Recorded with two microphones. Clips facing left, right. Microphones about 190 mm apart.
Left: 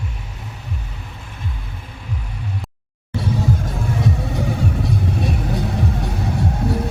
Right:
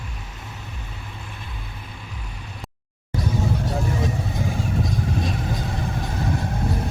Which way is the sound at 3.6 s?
65° left (ahead or behind).